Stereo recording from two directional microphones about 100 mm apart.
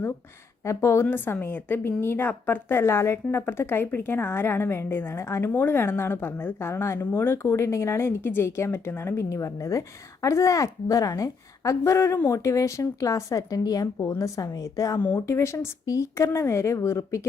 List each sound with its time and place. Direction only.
0.6 s a woman's voice: 30° left (ahead or behind)
14.9 s a woman's voice: 20° left (ahead or behind)